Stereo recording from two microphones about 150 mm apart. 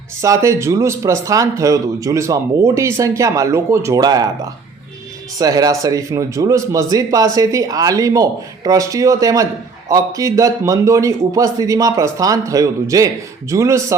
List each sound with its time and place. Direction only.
0.2 s speech: 20° right (ahead or behind)